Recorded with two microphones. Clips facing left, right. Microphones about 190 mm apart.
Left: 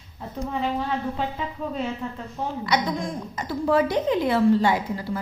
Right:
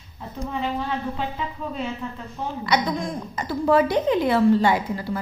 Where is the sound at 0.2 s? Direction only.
40° left (ahead or behind).